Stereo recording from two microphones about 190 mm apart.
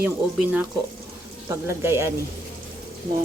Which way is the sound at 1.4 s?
15° right (ahead or behind).